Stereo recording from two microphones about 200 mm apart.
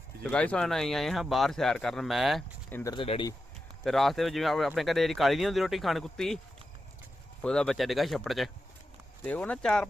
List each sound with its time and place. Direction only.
0.2 s speech: 5° left (ahead or behind)
2.9 s speech: 25° left (ahead or behind)
3.8 s speech: centre (ahead or behind)
7.4 s speech: 5° left (ahead or behind)